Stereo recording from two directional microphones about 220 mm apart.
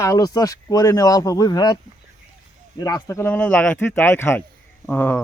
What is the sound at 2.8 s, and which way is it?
Speech, 15° left (ahead or behind).